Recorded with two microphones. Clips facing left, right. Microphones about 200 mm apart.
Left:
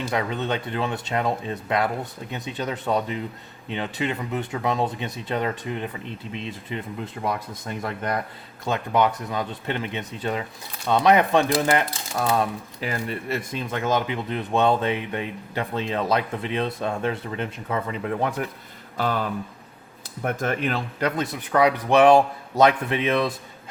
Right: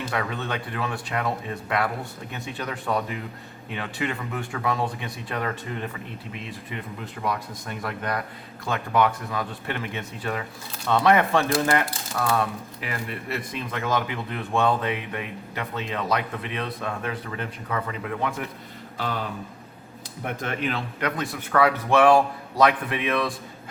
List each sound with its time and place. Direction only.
0.1 s speech: 20° left (ahead or behind)
18.2 s speech: 35° left (ahead or behind)
20.2 s speech: 45° left (ahead or behind)
21.0 s speech: 20° left (ahead or behind)